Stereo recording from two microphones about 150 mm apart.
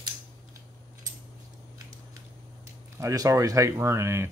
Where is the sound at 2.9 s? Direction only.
20° right (ahead or behind).